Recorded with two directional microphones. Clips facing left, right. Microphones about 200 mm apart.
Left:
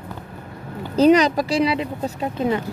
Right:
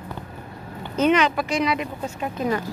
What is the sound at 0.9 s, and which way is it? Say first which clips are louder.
Speech: left 5 dB; 35° left (ahead or behind).